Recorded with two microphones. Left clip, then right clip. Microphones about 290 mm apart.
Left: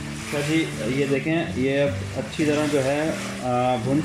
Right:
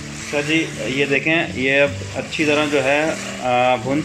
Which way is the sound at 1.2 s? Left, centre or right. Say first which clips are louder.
Right 6 dB; right.